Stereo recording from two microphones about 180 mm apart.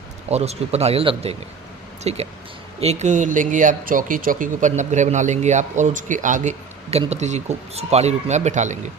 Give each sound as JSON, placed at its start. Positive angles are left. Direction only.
{"t": 0.3, "sound": "a man's voice", "side_deg": -35}